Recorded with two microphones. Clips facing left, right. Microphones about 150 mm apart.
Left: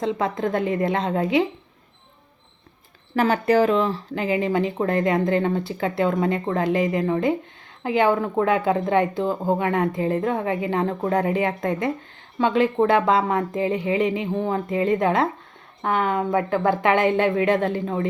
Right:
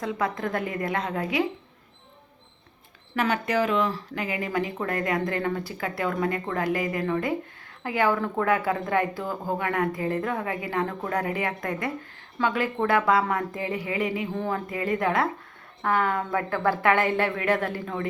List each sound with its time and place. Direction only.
0.0 s speech: 25° left (ahead or behind)
3.2 s speech: 30° left (ahead or behind)